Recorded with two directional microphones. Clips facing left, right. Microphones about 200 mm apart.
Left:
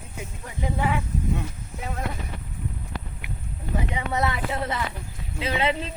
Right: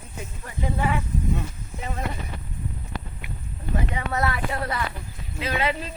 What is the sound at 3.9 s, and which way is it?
Speech, 15° left (ahead or behind).